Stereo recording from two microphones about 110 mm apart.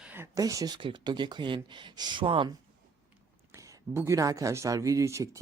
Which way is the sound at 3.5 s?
25° right (ahead or behind).